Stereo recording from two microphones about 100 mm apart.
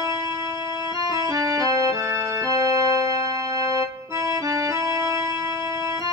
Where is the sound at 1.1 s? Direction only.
35° right (ahead or behind).